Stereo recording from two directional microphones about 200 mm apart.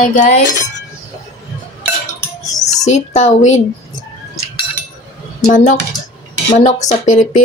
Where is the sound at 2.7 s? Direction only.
35° left (ahead or behind).